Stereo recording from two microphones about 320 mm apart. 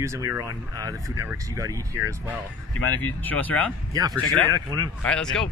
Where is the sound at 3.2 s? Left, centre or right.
Centre.